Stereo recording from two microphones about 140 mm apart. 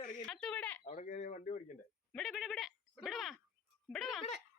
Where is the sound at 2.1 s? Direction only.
Centre (ahead or behind).